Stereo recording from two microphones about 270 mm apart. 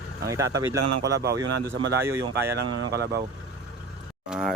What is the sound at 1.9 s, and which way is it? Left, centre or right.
Speech, centre.